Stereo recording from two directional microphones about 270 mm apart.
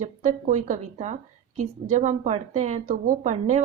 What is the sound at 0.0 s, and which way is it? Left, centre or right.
Speech, right.